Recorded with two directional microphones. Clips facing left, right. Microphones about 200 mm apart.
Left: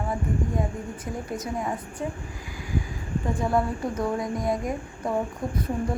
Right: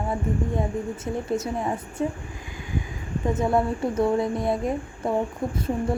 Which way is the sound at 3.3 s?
25° right (ahead or behind).